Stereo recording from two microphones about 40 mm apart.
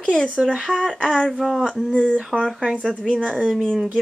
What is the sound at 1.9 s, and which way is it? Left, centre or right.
Speech, left.